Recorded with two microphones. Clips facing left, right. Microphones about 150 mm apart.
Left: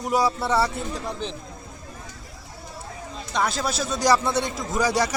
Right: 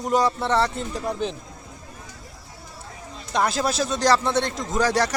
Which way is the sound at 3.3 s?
Centre (ahead or behind).